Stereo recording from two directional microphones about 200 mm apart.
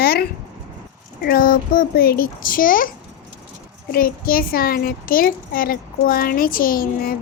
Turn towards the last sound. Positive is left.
turn(degrees=45)  # may be behind; listen again after turning